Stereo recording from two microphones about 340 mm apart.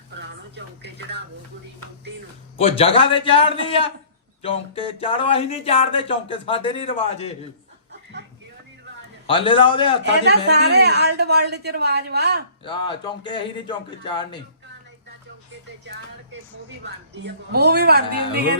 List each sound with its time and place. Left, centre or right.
0.2 s speech: right
2.6 s speech: centre
9.2 s speech: centre
10.0 s speech: right
12.6 s speech: centre
16.8 s speech: right